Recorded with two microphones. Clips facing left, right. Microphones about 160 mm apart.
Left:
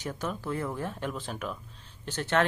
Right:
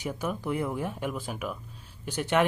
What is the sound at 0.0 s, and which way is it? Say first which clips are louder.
Speech: right 2 dB; 10° right (ahead or behind).